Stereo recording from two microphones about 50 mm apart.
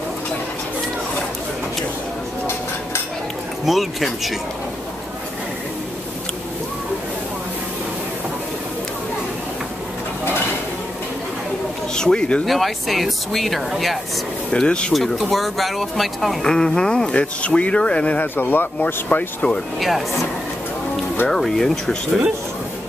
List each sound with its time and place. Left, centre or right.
3.6 s speech: centre
11.9 s speech: centre
12.4 s speech: centre
14.5 s speech: centre
14.9 s speech: centre
16.4 s speech: centre; by 18.3 s left
18.3 s speech: left
19.0 s speech: left
21.3 s speech: centre